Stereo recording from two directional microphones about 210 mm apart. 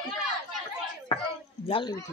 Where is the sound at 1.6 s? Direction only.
20° left (ahead or behind).